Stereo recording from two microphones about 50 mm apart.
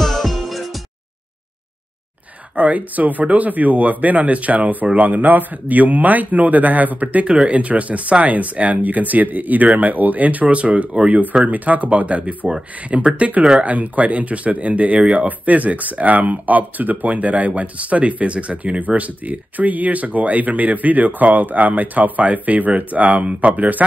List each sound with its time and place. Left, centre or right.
0.0 s music: centre
2.5 s speech: right
12.4 s speech: centre; by 23.8 s right